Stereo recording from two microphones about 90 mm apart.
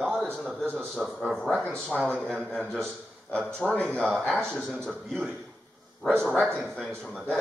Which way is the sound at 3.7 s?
10° left (ahead or behind).